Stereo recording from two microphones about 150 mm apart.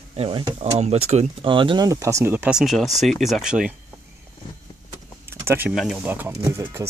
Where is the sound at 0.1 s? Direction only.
40° right (ahead or behind).